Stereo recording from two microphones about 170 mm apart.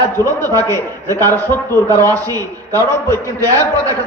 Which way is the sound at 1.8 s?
20° right (ahead or behind).